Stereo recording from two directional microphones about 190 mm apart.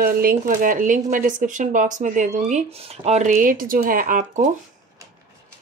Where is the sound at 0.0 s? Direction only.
50° right (ahead or behind).